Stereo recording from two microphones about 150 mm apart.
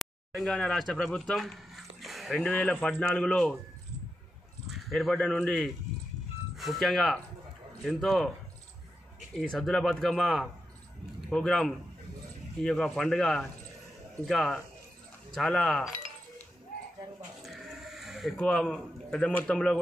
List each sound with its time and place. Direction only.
0.0 s speech: centre (ahead or behind)
4.6 s speech: centre (ahead or behind)
9.3 s speech: 5° left (ahead or behind)
17.4 s a sound: centre (ahead or behind)